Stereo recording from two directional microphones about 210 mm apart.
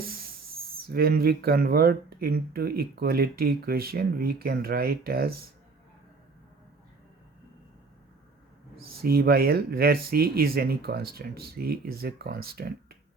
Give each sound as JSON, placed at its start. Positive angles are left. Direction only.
{"t": 0.9, "sound": "speech", "side_deg": -45}
{"t": 8.7, "sound": "speech", "side_deg": -45}